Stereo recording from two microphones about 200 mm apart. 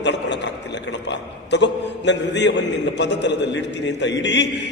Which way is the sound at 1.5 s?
60° left (ahead or behind).